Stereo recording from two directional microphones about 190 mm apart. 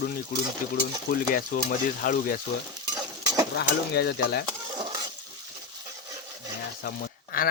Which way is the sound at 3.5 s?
60° left (ahead or behind).